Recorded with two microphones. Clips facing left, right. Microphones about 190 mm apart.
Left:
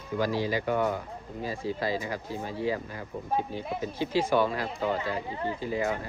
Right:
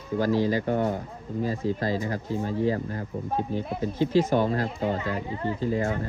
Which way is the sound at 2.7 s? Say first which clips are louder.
Right 4 dB; 45° right (ahead or behind).